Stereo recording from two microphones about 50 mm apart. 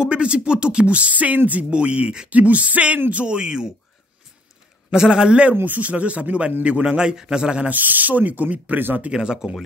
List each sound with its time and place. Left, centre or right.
0.0 s speech: right
4.9 s speech: centre
7.7 s speech: right
9.1 s speech: centre